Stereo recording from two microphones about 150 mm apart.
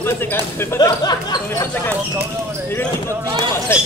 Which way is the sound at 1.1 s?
25° left (ahead or behind).